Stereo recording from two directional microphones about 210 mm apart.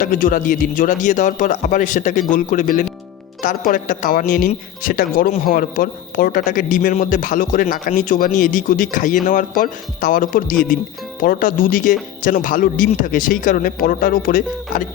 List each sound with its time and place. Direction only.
0.0 s speech: 40° left (ahead or behind)